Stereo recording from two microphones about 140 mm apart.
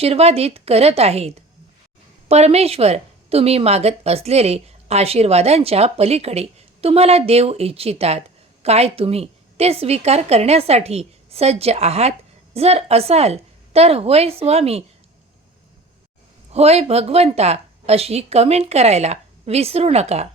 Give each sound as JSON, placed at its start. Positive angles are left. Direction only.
{"t": 0.0, "sound": "a woman's voice", "side_deg": -45}
{"t": 16.5, "sound": "a woman's voice", "side_deg": -50}